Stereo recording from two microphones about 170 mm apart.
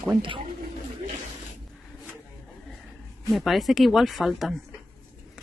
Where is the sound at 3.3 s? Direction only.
Centre (ahead or behind).